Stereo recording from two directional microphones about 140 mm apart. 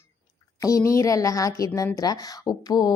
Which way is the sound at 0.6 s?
25° left (ahead or behind).